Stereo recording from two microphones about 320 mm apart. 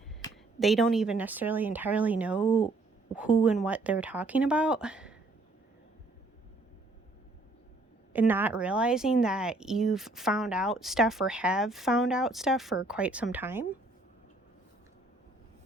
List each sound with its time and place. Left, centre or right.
0.2 s a woman's voice: centre
8.1 s a woman's voice: centre